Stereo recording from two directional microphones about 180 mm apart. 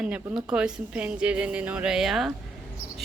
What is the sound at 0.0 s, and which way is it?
Speech, 5° right (ahead or behind).